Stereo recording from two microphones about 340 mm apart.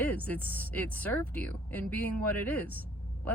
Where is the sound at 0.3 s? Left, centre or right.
Centre.